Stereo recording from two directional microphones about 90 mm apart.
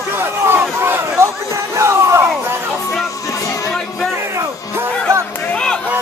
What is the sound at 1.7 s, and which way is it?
Music, 30° right (ahead or behind).